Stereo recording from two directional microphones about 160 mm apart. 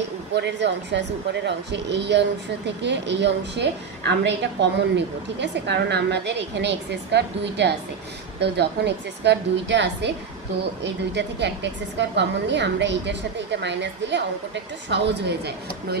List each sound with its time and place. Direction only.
0.3 s speech: 90° right